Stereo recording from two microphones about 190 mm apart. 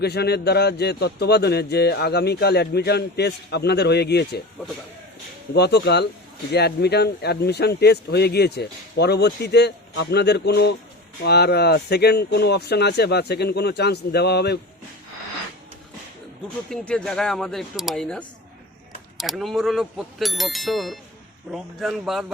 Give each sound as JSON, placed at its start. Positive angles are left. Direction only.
{"t": 0.0, "sound": "a man's voice", "side_deg": 60}
{"t": 5.5, "sound": "a man's voice", "side_deg": 60}
{"t": 16.6, "sound": "speech", "side_deg": 5}